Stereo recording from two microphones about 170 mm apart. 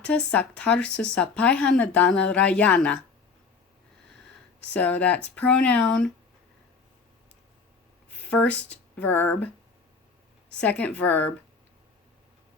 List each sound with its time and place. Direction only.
0.0 s speech: 10° left (ahead or behind)
4.6 s speech: 10° left (ahead or behind)
8.2 s speech: 5° left (ahead or behind)
10.5 s speech: 5° left (ahead or behind)